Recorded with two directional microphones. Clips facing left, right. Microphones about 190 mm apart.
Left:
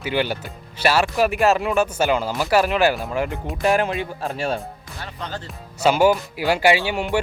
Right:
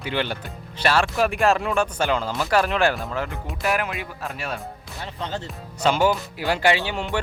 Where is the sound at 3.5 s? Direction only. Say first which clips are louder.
Left 5 dB; 25° left (ahead or behind).